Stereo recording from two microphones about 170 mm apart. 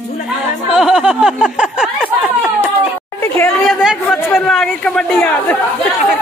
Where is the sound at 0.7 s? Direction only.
Centre (ahead or behind).